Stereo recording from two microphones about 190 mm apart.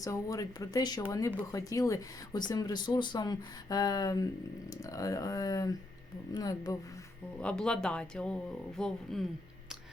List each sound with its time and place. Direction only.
0.0 s speech: 15° left (ahead or behind)
7.4 s speech: 5° left (ahead or behind)